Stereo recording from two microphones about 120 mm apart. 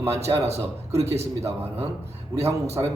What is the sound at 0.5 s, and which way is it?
A man's voice, 25° right (ahead or behind).